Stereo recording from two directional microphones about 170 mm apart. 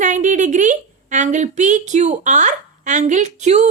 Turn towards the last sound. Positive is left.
turn(degrees=-40)  # may be behind; listen again after turning